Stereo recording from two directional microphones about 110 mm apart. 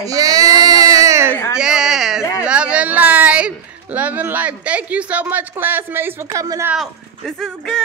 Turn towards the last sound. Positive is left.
turn(degrees=5)  # may be behind; listen again after turning